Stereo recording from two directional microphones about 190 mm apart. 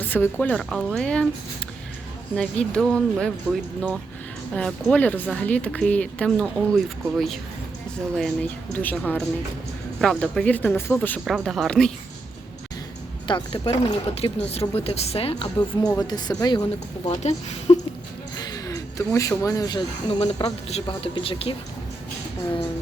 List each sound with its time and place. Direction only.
0.1 s speech: 10° left (ahead or behind)
2.3 s speech: 5° left (ahead or behind)
8.7 s speech: 10° left (ahead or behind)
13.2 s speech: 25° left (ahead or behind)
17.1 s speech: 35° left (ahead or behind)
18.3 s a sound: 20° left (ahead or behind)
19.4 s speech: 20° left (ahead or behind)